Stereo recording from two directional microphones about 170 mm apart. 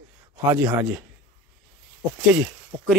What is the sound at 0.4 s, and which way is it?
Speech, 15° right (ahead or behind).